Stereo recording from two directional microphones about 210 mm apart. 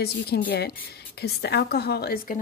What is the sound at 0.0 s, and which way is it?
A woman's voice, 50° left (ahead or behind).